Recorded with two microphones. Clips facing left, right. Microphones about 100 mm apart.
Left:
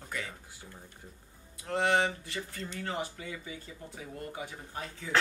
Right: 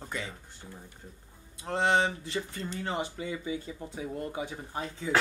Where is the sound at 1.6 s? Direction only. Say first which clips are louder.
Right 2 dB; 25° right (ahead or behind).